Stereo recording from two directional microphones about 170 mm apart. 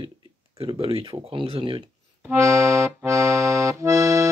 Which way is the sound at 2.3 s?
15° right (ahead or behind).